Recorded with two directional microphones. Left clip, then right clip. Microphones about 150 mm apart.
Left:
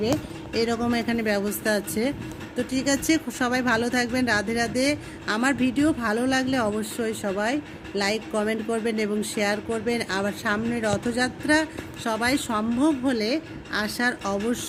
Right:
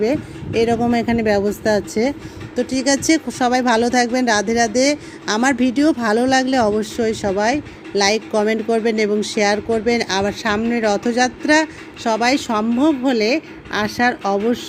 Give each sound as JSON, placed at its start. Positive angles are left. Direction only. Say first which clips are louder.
{"t": 0.0, "sound": "speech", "louder": "right 7 dB", "side_deg": -25}